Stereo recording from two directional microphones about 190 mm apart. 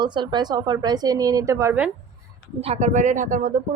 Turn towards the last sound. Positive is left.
turn(degrees=-40)  # may be behind; listen again after turning